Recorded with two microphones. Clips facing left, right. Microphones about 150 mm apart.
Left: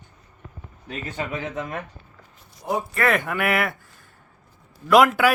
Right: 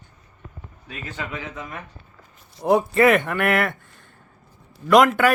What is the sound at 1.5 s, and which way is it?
Speech, 50° left (ahead or behind).